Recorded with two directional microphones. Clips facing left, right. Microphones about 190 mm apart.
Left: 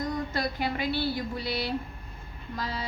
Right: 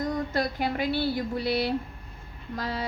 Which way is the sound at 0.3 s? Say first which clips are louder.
Right 3 dB; 50° right (ahead or behind).